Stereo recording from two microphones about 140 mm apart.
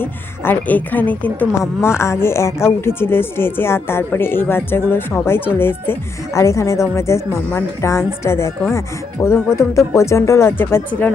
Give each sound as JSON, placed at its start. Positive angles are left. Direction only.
{"t": 0.0, "sound": "a woman's voice", "side_deg": 15}